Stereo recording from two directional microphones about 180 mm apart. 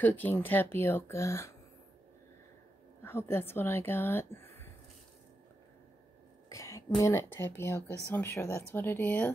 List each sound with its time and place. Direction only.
0.0 s speech: 10° left (ahead or behind)
3.0 s speech: 15° left (ahead or behind)
6.5 s a sound: 15° left (ahead or behind)
7.0 s speech: 15° left (ahead or behind)